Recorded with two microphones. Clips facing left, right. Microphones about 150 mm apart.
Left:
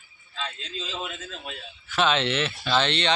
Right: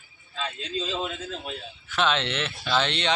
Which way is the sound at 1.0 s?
30° right (ahead or behind).